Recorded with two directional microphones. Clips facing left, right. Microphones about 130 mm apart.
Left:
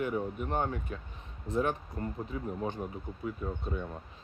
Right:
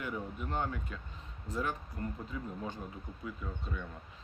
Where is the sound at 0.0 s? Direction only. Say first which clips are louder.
Left 7 dB; 25° left (ahead or behind).